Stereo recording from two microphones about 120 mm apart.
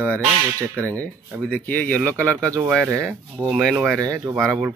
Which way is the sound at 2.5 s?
25° right (ahead or behind).